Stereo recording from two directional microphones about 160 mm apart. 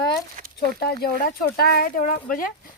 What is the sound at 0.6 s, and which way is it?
Speech, 80° left.